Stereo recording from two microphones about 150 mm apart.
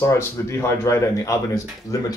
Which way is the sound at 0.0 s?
20° left (ahead or behind).